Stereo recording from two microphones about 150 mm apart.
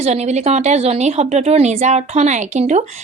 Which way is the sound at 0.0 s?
50° right (ahead or behind).